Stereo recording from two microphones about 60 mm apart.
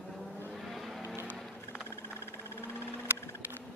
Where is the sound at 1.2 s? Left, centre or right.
Right.